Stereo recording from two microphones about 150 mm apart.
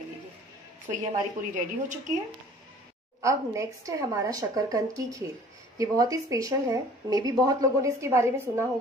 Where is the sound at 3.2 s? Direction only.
20° right (ahead or behind).